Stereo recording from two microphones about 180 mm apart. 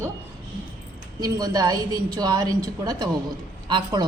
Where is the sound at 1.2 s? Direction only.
20° right (ahead or behind).